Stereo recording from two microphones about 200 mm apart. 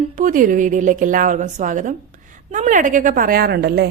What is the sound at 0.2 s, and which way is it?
A woman's voice, 40° right (ahead or behind).